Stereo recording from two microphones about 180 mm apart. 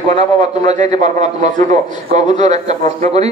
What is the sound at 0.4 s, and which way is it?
A man's voice, 40° right (ahead or behind).